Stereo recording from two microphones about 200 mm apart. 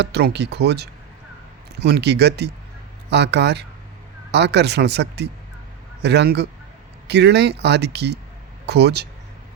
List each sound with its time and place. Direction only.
0.0 s speech: 55° right (ahead or behind)